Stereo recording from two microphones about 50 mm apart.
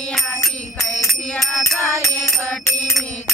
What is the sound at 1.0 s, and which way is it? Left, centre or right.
Music, centre.